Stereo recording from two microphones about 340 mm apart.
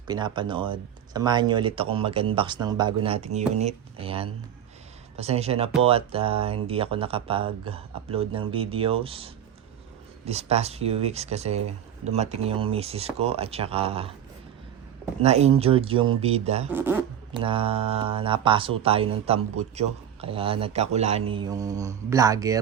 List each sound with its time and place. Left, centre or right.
0.1 s speech: centre
15.2 s speech: centre
16.7 s speech: centre